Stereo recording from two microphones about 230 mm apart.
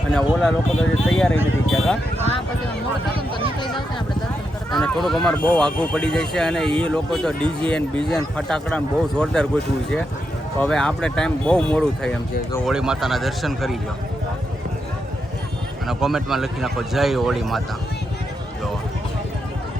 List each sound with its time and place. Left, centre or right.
0.1 s speech: centre
3.2 s speech: right
4.7 s speech: centre
10.6 s speech: centre
15.9 s speech: centre